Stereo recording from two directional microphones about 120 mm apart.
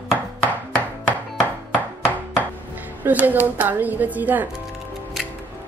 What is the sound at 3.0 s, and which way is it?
Speech, 15° right (ahead or behind).